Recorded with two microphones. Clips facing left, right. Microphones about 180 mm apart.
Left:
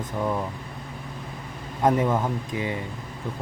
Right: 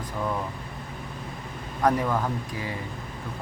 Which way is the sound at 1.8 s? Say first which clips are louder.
Left 2 dB; 20° left (ahead or behind).